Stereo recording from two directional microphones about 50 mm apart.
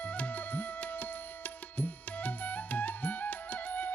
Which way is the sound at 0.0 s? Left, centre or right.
Left.